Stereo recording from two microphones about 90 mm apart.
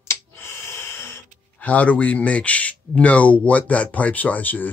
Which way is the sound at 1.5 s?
15° left (ahead or behind).